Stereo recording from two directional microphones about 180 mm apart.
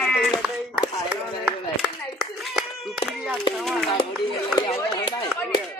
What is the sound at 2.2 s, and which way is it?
Clapping, centre (ahead or behind).